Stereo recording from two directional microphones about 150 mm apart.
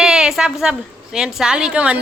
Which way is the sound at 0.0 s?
5° right (ahead or behind).